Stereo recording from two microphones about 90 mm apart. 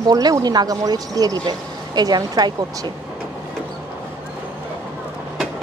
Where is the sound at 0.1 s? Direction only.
45° right (ahead or behind).